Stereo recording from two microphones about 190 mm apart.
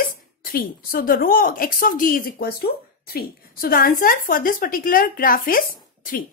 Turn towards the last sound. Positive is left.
turn(degrees=50)  # may be behind; listen again after turning